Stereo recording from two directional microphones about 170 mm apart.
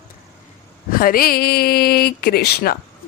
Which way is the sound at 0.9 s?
60° left (ahead or behind).